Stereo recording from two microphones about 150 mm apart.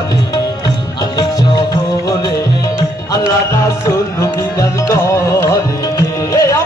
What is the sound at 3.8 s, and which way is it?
Music, 20° left (ahead or behind).